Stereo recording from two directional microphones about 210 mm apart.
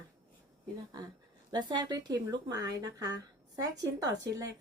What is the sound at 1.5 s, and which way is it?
A woman's voice, 20° right (ahead or behind).